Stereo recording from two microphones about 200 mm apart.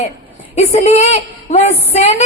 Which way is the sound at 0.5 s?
35° left (ahead or behind).